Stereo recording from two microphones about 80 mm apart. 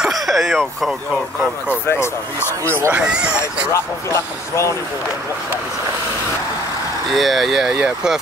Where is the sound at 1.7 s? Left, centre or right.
Left.